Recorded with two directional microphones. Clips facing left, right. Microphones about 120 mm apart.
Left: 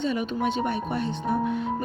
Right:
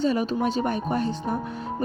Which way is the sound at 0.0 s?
35° right (ahead or behind).